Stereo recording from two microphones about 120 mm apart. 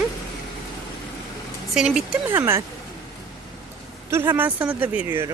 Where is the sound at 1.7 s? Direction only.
5° right (ahead or behind).